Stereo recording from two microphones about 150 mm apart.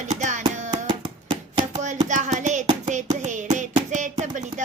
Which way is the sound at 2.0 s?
55° right (ahead or behind).